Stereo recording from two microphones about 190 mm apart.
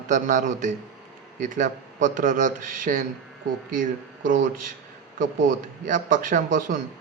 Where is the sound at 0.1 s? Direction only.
45° right (ahead or behind).